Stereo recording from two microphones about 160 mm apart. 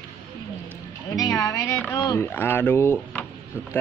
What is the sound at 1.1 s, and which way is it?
Speech, 20° left (ahead or behind).